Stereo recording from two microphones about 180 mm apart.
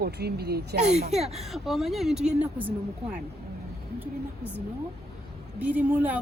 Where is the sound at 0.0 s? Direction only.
65° right (ahead or behind).